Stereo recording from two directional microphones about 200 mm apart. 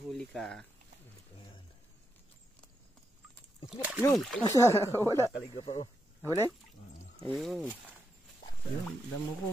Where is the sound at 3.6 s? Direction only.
5° right (ahead or behind).